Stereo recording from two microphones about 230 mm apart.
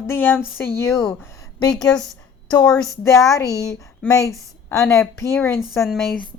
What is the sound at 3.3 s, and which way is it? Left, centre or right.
Speech, centre.